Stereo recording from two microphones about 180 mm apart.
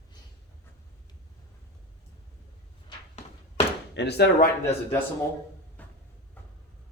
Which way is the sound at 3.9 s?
65° left (ahead or behind).